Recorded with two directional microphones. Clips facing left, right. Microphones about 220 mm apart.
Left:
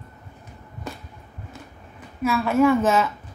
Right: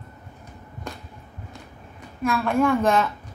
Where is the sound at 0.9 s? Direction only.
5° left (ahead or behind).